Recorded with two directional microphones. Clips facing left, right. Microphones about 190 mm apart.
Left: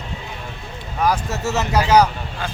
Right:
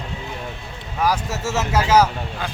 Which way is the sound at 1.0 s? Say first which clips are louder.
Left 1 dB; 5° right (ahead or behind).